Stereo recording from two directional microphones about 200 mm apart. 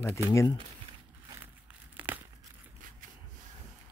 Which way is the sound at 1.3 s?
10° right (ahead or behind).